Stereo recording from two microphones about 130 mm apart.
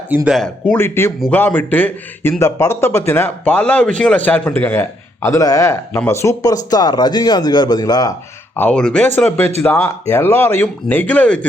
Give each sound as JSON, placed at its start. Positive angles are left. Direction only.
{"t": 0.3, "sound": "speech", "side_deg": 0}
{"t": 0.8, "sound": "speech", "side_deg": 20}
{"t": 8.5, "sound": "speech", "side_deg": 10}